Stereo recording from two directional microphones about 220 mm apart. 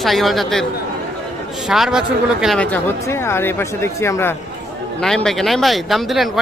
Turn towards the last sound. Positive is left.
turn(degrees=0)  # may be behind; listen again after turning